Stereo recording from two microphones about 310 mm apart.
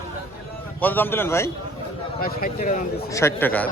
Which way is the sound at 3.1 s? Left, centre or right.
Centre.